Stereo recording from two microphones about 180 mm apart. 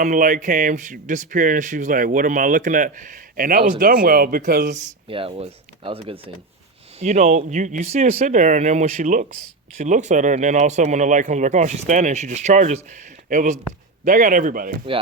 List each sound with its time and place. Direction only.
0.0 s speech: 50° right (ahead or behind)
4.7 s speech: 40° right (ahead or behind)